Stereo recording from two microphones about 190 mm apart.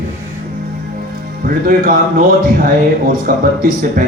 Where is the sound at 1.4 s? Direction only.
50° right (ahead or behind).